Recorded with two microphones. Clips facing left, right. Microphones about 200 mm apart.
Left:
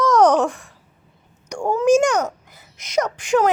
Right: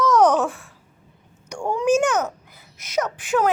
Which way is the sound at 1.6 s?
5° left (ahead or behind).